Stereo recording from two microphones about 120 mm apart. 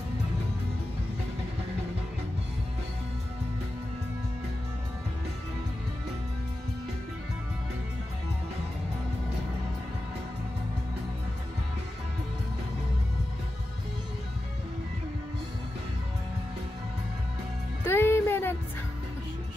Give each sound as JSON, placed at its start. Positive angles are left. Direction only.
{"t": 17.8, "sound": "music", "side_deg": 20}